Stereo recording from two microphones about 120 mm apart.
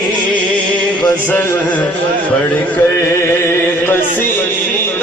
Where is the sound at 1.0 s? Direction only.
15° left (ahead or behind).